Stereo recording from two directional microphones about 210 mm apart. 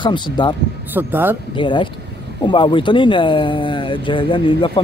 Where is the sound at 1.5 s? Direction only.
25° left (ahead or behind).